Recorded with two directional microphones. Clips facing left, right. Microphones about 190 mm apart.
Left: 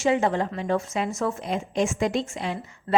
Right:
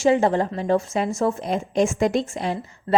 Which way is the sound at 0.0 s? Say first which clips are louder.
Right 4 dB; 35° right (ahead or behind).